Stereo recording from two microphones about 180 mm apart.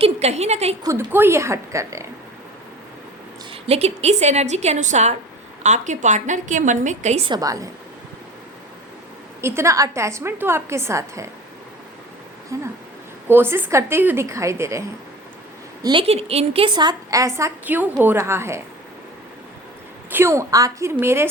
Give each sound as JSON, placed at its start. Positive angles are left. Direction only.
{"t": 0.0, "sound": "a woman's voice", "side_deg": -35}
{"t": 0.9, "sound": "a woman's voice", "side_deg": -10}
{"t": 3.5, "sound": "a woman's voice", "side_deg": -35}
{"t": 7.3, "sound": "a woman's voice", "side_deg": -20}
{"t": 9.4, "sound": "a woman's voice", "side_deg": -15}
{"t": 12.5, "sound": "a woman's voice", "side_deg": -15}
{"t": 15.8, "sound": "a woman's voice", "side_deg": -30}
{"t": 20.1, "sound": "a woman's voice", "side_deg": -15}